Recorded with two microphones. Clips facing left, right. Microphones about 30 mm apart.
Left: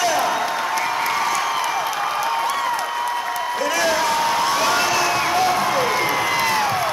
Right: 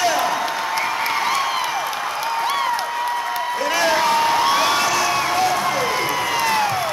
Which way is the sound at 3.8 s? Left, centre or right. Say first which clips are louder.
Right 3 dB; centre.